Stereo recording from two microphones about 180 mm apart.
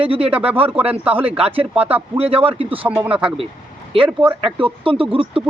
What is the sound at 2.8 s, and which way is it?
Speech, 10° right (ahead or behind).